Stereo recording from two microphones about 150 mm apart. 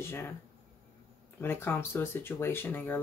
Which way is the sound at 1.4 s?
15° left (ahead or behind).